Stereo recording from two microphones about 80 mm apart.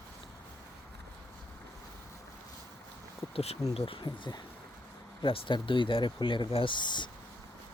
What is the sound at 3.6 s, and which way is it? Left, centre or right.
Speech, left.